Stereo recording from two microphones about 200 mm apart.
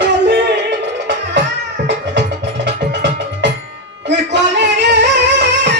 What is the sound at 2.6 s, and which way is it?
Music, 60° right (ahead or behind).